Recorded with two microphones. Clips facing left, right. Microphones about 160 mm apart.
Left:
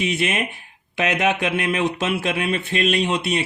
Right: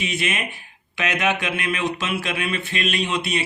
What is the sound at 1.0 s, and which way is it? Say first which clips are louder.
Speech: left 2 dB; 30° left (ahead or behind).